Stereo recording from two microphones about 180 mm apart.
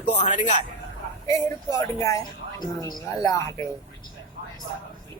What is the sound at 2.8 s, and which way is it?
Speech, 20° left (ahead or behind).